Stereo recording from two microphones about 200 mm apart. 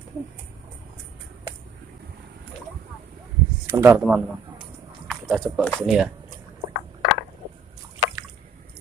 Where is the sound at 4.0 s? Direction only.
5° right (ahead or behind).